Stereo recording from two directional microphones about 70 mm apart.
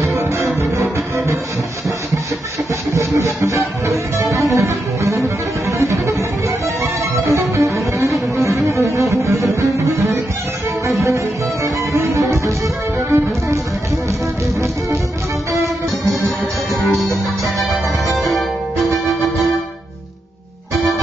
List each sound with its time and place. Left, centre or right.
0.0 s music: right
2.9 s music: right
18.1 s music: centre